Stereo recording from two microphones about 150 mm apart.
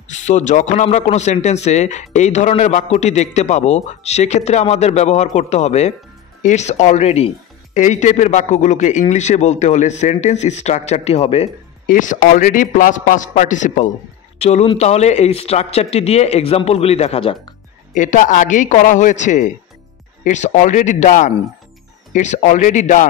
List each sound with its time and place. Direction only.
0.1 s speech: 55° left (ahead or behind)
11.8 s a man's voice: 60° left (ahead or behind)
14.4 s speech: 45° left (ahead or behind)
17.9 s a man's voice: 60° left (ahead or behind)